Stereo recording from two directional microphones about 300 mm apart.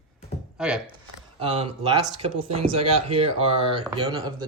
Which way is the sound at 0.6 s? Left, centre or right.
Centre.